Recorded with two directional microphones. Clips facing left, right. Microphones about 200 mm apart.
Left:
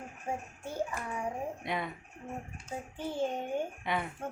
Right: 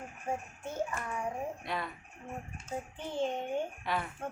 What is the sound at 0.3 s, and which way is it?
Speech, 10° left (ahead or behind).